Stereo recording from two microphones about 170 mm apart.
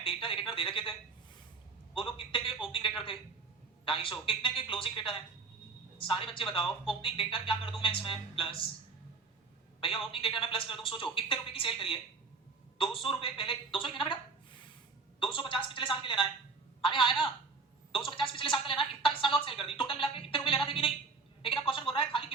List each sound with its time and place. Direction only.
0.0 s a woman's voice: 30° left (ahead or behind)
2.0 s a woman's voice: 30° left (ahead or behind)
9.8 s a woman's voice: 30° left (ahead or behind)